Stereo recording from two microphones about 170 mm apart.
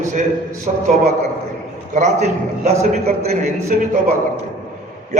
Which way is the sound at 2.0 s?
45° right (ahead or behind).